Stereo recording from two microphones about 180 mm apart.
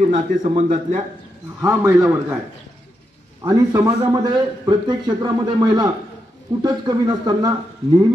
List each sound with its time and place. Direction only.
0.5 s speech: 40° right (ahead or behind)
1.6 s a man's voice: 15° right (ahead or behind)
3.4 s a man's voice: 20° right (ahead or behind)